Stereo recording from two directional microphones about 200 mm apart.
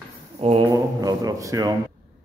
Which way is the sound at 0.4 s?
30° right (ahead or behind).